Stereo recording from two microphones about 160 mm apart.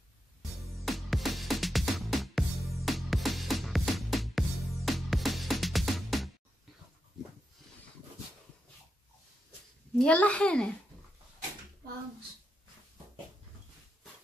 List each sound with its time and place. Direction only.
0.7 s music: centre (ahead or behind)
9.9 s a child's voice: 5° left (ahead or behind)